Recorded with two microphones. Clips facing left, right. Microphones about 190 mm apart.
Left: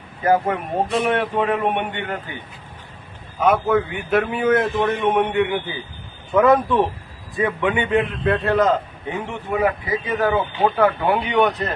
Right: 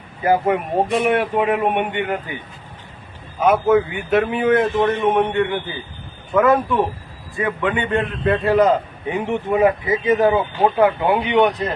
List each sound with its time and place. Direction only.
0.3 s a man's voice: 10° right (ahead or behind)
3.4 s a man's voice: 5° right (ahead or behind); by 8.0 s 10° left (ahead or behind)
8.2 s a man's voice: 5° right (ahead or behind); by 11.6 s 20° right (ahead or behind)